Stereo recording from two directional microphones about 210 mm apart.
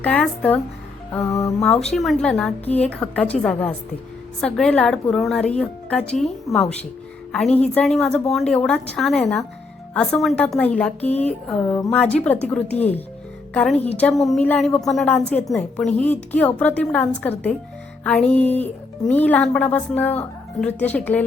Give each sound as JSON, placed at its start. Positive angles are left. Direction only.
{"t": 0.0, "sound": "speech", "side_deg": 5}
{"t": 1.6, "sound": "a woman's voice", "side_deg": 5}